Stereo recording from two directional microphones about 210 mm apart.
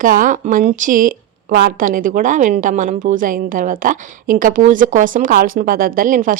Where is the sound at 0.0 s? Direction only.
40° right (ahead or behind).